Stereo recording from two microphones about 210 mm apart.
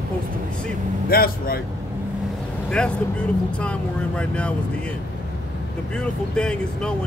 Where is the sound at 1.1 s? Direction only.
45° left (ahead or behind).